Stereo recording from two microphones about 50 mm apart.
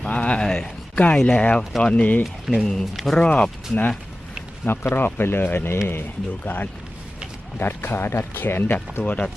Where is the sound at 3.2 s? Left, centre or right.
Left.